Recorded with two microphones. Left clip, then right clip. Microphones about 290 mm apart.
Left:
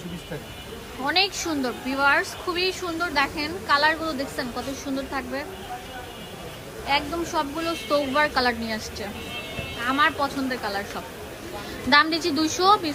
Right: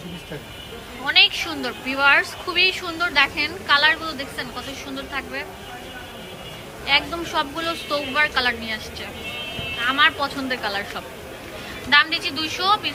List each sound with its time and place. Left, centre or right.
1.0 s a woman's voice: centre
6.8 s a woman's voice: centre
11.9 s a woman's voice: centre